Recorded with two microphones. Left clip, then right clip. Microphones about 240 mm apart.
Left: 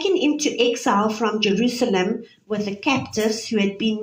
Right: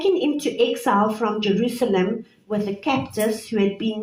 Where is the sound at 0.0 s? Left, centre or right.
Left.